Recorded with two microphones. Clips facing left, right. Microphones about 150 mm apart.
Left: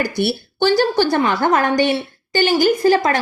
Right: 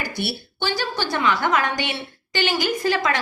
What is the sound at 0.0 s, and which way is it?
A woman's voice, 45° left (ahead or behind).